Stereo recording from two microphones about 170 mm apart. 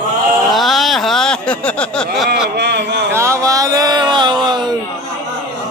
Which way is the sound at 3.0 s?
15° right (ahead or behind).